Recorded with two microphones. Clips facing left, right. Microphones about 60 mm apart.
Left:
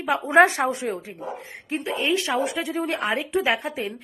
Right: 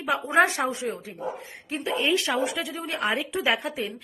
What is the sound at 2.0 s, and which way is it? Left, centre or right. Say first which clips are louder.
Speech: left 1 dB; centre.